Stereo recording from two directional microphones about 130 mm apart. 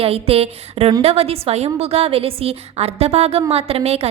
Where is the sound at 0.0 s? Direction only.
50° right (ahead or behind).